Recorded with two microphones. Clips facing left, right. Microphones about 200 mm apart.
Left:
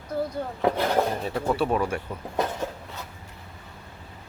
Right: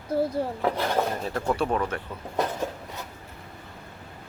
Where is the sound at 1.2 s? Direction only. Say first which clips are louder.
Left 1 dB; 5° left (ahead or behind).